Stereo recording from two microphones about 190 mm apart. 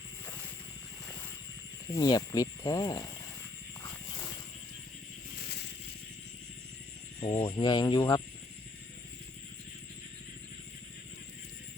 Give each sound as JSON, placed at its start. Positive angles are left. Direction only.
{"t": 1.9, "sound": "speech", "side_deg": 20}
{"t": 7.2, "sound": "speech", "side_deg": 25}